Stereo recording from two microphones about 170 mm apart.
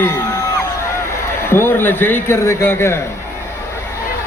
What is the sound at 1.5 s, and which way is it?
A man's voice, 15° left (ahead or behind).